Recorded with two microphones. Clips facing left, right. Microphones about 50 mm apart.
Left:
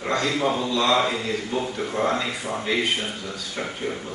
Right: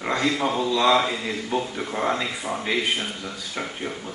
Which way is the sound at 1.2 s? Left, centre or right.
Centre.